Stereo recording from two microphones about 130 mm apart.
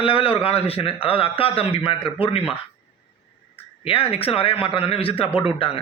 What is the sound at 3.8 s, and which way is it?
A man's voice, 45° left (ahead or behind).